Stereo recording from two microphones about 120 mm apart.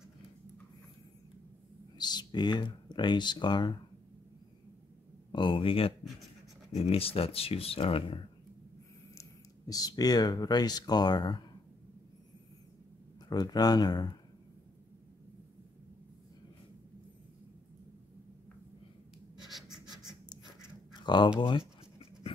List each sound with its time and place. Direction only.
2.0 s speech: 35° left (ahead or behind)
5.3 s speech: 45° left (ahead or behind)
9.1 s speech: 30° left (ahead or behind)
13.3 s speech: 35° left (ahead or behind)
19.4 s writing: 5° right (ahead or behind)
21.0 s a sound: 40° left (ahead or behind)
21.4 s writing: 40° left (ahead or behind)